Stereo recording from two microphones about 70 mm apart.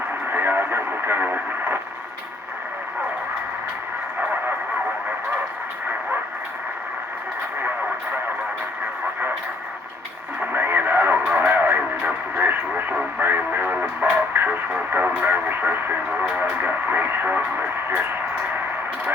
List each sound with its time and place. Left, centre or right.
0.3 s speech: right
10.4 s radio: right